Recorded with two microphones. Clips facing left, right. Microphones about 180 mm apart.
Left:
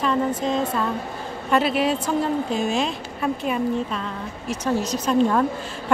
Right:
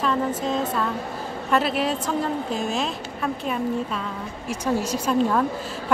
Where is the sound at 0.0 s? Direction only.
Centre (ahead or behind).